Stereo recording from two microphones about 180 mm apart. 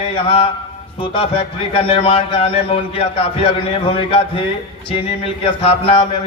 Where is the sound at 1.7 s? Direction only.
30° left (ahead or behind).